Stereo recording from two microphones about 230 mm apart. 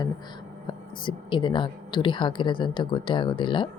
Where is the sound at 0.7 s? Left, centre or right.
Left.